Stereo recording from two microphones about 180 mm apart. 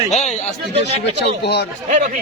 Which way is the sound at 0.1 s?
40° left (ahead or behind).